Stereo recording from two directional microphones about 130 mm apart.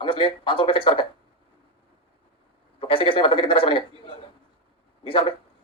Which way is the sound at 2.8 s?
40° left (ahead or behind).